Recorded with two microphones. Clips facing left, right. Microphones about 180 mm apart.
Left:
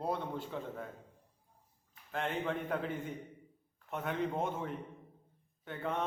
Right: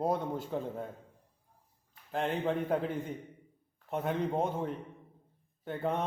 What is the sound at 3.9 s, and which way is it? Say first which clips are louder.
Mantra: right 4 dB; 35° right (ahead or behind).